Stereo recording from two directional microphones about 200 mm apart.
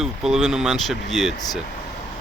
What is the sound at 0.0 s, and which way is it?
Speech, centre (ahead or behind).